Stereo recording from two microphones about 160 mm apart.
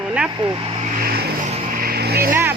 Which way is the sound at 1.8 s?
75° right (ahead or behind).